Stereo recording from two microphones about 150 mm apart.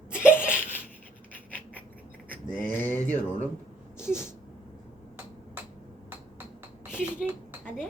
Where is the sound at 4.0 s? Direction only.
15° left (ahead or behind).